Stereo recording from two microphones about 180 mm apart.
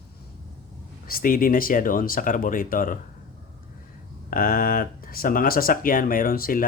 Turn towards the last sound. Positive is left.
turn(degrees=55)  # may be behind; listen again after turning